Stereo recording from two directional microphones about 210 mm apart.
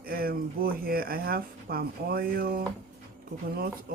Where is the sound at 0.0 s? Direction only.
45° right (ahead or behind).